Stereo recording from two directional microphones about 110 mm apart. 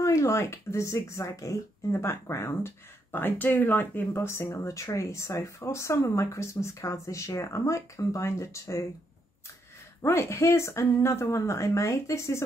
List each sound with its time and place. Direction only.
0.0 s speech: 25° left (ahead or behind)
10.0 s speech: 25° left (ahead or behind)